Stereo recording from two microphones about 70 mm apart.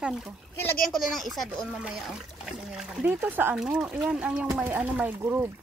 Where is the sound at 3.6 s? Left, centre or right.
Centre; by 5.4 s right.